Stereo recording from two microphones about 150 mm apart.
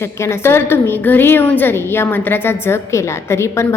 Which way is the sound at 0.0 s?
15° left (ahead or behind).